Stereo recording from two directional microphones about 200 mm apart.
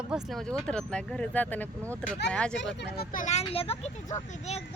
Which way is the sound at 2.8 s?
55° left (ahead or behind).